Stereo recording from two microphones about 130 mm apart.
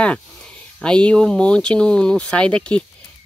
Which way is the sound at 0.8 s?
5° left (ahead or behind).